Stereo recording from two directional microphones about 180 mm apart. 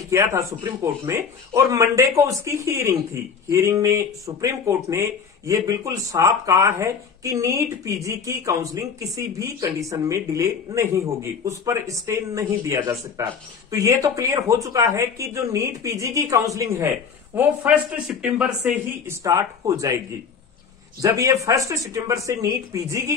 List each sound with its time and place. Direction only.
0.1 s a man's voice: 15° right (ahead or behind)
17.4 s speech: 5° right (ahead or behind)
19.0 s speech: 15° right (ahead or behind)
21.0 s a man's voice: 20° right (ahead or behind)